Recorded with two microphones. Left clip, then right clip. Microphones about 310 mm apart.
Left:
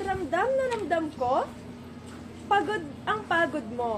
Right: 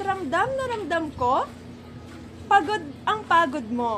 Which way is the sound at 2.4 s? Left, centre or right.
Right.